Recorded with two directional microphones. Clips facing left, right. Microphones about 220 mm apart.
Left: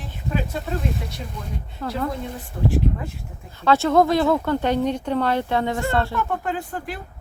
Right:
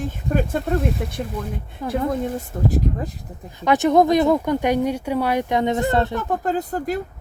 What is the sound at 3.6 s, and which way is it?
Speech, 15° right (ahead or behind).